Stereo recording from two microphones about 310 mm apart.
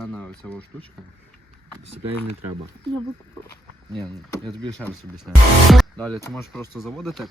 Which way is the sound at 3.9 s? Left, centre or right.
Centre.